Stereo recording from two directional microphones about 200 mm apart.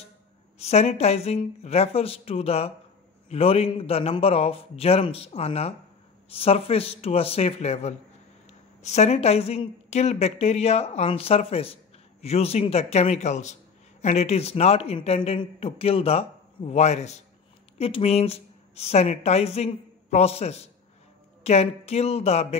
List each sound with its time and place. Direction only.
0.6 s a man's voice: 35° left (ahead or behind)